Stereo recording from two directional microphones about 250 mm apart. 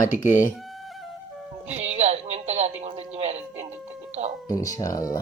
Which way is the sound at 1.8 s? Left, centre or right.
Right.